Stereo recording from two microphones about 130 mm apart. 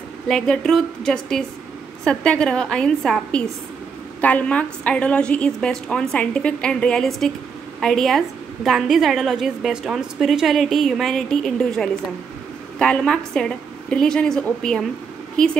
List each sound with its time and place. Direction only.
0.3 s a woman's voice: 5° left (ahead or behind)